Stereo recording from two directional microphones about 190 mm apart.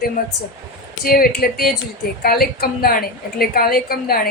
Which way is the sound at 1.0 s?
50° left (ahead or behind).